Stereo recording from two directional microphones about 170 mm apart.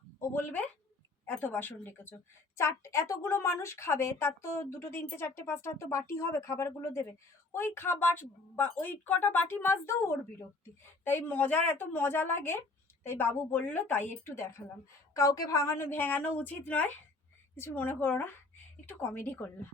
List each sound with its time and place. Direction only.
0.2 s speech: 10° left (ahead or behind)